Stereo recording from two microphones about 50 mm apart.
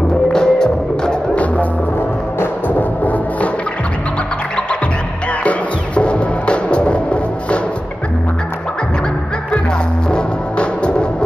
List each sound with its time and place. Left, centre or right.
0.3 s music: centre
1.3 s music: left
3.0 s music: left
5.4 s music: left
10.1 s music: left